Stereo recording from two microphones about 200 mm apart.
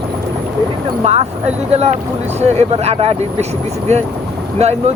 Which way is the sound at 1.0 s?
30° right (ahead or behind).